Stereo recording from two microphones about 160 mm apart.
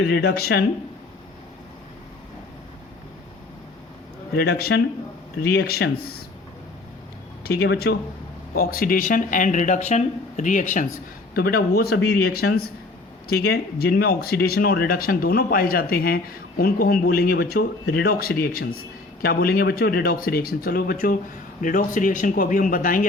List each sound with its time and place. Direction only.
0.0 s speech: 90° left
4.4 s speech: 75° left (ahead or behind)
7.4 s speech: 85° left
8.5 s speech: 65° left (ahead or behind); by 10.8 s 50° left (ahead or behind)
11.3 s speech: 70° left (ahead or behind)